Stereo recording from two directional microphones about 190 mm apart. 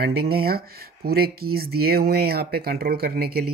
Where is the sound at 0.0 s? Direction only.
55° right (ahead or behind).